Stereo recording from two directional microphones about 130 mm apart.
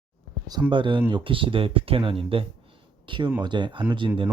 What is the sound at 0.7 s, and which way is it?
Speech, 40° right (ahead or behind).